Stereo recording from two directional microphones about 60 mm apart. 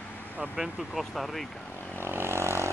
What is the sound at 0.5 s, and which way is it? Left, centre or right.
Speech, centre.